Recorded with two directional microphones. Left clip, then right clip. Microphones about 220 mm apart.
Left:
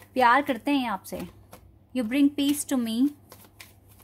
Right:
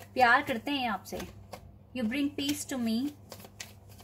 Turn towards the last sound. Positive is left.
turn(degrees=50)  # may be behind; listen again after turning